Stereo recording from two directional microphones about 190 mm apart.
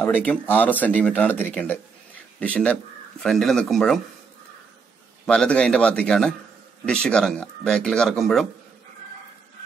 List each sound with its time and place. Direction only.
0.0 s speech: 10° left (ahead or behind)
5.2 s speech: 5° left (ahead or behind)